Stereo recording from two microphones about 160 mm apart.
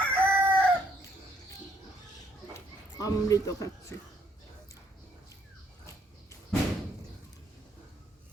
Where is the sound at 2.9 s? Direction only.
20° left (ahead or behind).